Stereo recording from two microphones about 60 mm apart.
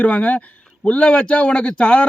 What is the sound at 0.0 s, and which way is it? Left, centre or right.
Speech, left.